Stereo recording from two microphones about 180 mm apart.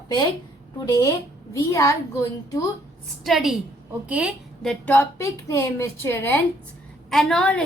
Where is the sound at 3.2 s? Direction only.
Centre (ahead or behind).